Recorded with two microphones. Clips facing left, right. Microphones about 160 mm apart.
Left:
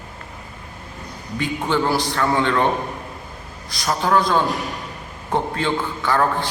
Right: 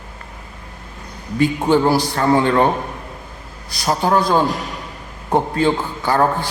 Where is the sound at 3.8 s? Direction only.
30° right (ahead or behind).